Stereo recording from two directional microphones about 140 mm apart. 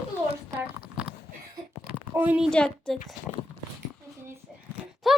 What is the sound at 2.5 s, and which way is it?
Speech, 5° left (ahead or behind).